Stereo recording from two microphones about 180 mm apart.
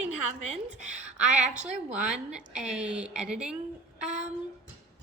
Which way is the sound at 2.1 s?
5° right (ahead or behind).